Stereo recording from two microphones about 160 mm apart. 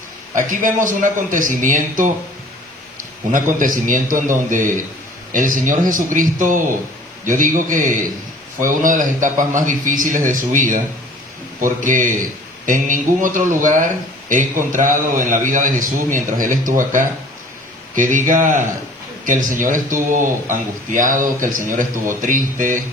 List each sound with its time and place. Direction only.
0.3 s a man's voice: 55° right (ahead or behind)
3.3 s a man's voice: 55° right (ahead or behind)